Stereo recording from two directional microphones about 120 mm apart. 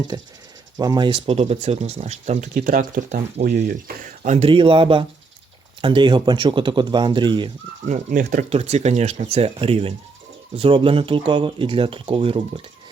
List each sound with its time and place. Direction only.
0.1 s speech: 35° right (ahead or behind)
1.3 s speech: 65° right (ahead or behind)
3.1 s speech: 90° right
4.4 s speech: 45° right (ahead or behind)
7.9 s speech: 85° right; by 12.6 s 50° right (ahead or behind)